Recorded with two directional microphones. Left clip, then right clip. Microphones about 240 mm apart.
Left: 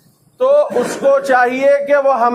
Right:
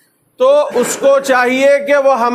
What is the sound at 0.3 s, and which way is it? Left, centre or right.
A man's voice, right.